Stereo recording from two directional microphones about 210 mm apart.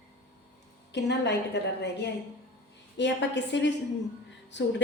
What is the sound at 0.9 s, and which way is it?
A woman's voice, 55° left (ahead or behind).